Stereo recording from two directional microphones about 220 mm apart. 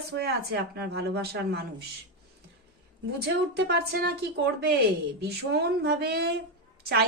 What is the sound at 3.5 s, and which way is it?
A woman's voice, 45° right (ahead or behind).